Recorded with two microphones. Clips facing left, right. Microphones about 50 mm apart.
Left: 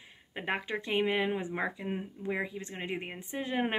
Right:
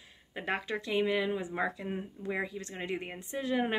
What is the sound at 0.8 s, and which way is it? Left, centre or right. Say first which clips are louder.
Speech: left 1 dB; left.